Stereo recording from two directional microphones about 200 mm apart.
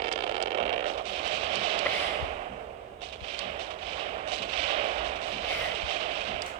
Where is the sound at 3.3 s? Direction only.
30° right (ahead or behind).